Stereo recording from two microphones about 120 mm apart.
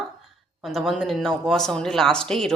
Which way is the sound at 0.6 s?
Centre (ahead or behind).